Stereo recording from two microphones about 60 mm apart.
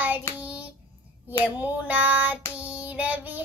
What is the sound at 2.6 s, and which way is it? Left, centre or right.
Child singing, right.